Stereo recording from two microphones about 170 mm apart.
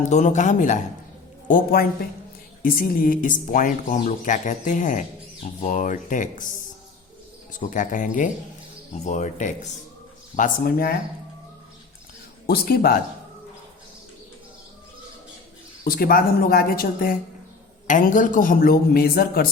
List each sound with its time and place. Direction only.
0.1 s speech: 45° left (ahead or behind)
1.5 s speech: 60° left (ahead or behind)
7.5 s speech: 50° left (ahead or behind)
10.3 s speech: 55° left (ahead or behind)
12.5 s speech: 65° left (ahead or behind)
15.8 s speech: 60° left (ahead or behind)